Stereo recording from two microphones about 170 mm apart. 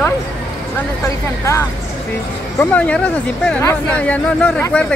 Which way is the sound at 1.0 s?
15° left (ahead or behind).